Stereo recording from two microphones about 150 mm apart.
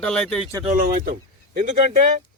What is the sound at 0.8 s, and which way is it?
Speech, 75° right (ahead or behind).